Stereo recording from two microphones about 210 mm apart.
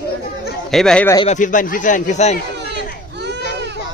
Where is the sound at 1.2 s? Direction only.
35° left (ahead or behind).